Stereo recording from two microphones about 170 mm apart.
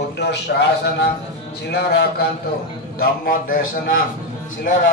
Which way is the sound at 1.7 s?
75° left (ahead or behind).